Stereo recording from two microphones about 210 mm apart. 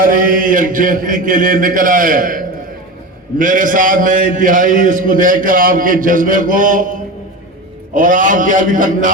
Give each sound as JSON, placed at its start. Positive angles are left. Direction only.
{"t": 0.0, "sound": "a man's voice", "side_deg": -40}